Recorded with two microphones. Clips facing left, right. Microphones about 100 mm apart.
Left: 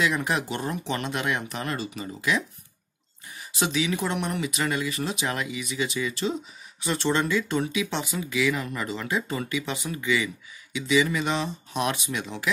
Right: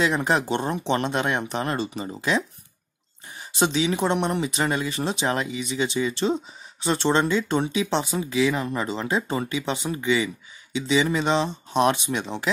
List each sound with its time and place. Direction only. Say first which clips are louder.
0.0 s speech: right 3 dB; 30° right (ahead or behind)